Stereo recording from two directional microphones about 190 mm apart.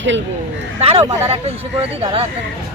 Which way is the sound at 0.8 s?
30° right (ahead or behind).